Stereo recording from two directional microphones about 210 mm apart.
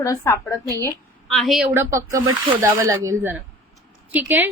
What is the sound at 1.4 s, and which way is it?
Speech, centre (ahead or behind).